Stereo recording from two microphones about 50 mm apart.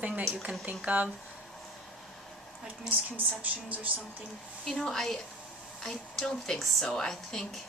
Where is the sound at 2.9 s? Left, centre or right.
Right.